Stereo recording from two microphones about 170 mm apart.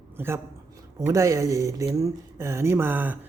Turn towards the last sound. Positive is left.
turn(degrees=-10)  # may be behind; listen again after turning